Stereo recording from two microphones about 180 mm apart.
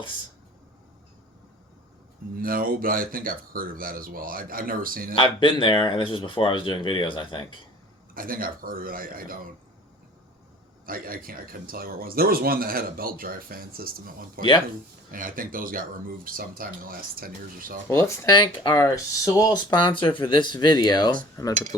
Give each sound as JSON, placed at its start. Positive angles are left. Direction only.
{"t": 2.3, "sound": "speech", "side_deg": -55}
{"t": 5.1, "sound": "speech", "side_deg": 30}
{"t": 8.1, "sound": "speech", "side_deg": -50}
{"t": 10.8, "sound": "speech", "side_deg": -55}
{"t": 17.8, "sound": "speech", "side_deg": 15}